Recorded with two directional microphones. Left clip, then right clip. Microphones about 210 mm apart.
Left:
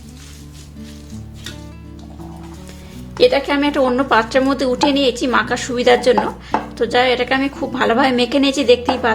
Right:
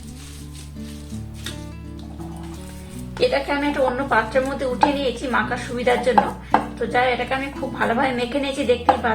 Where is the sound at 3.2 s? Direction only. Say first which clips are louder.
Left 6 dB; 40° left (ahead or behind).